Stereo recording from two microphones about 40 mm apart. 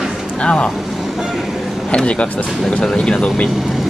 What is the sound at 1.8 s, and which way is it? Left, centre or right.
Speech, left.